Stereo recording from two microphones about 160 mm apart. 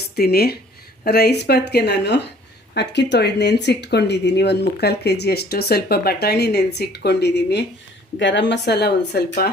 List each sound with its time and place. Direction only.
0.2 s speech: 75° left (ahead or behind)